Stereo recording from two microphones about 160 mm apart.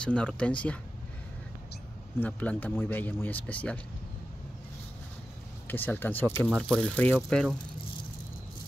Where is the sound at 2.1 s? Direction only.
10° left (ahead or behind).